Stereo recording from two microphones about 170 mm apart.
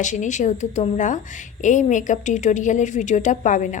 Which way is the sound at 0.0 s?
45° left (ahead or behind).